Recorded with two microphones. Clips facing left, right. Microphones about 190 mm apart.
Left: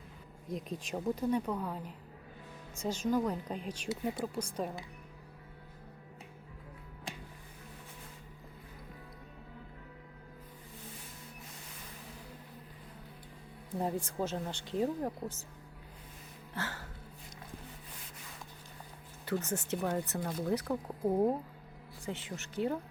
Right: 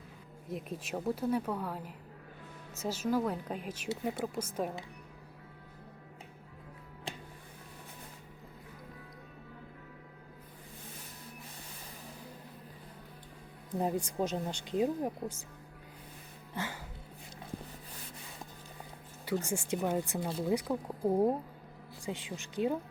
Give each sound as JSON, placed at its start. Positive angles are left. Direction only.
{"t": 0.5, "sound": "speech", "side_deg": -5}
{"t": 13.7, "sound": "speech", "side_deg": -15}
{"t": 16.6, "sound": "a sound", "side_deg": -15}
{"t": 19.5, "sound": "speech", "side_deg": -10}